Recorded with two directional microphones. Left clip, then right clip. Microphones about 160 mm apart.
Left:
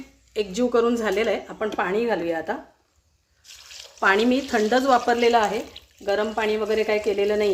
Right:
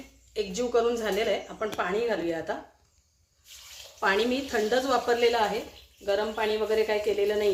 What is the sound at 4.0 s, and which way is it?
Speech, 90° left.